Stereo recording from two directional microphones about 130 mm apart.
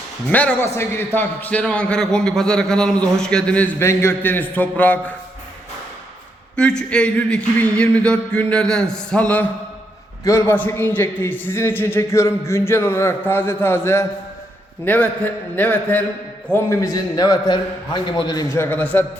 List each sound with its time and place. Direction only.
0.3 s a man's voice: 10° left (ahead or behind)
3.8 s a man's voice: 20° left (ahead or behind)
6.6 s a man's voice: 5° left (ahead or behind); by 18.4 s 30° left (ahead or behind)
18.5 s a man's voice: 15° left (ahead or behind)